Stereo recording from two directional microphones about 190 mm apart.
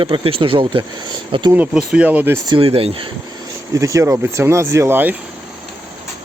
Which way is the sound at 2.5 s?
30° right (ahead or behind).